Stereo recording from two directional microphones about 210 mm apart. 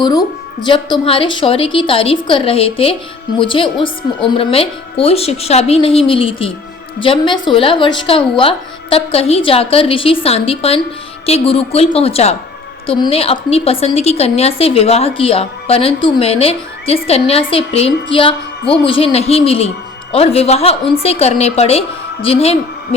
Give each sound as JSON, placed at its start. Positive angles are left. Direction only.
{"t": 0.0, "sound": "a woman's voice", "side_deg": 20}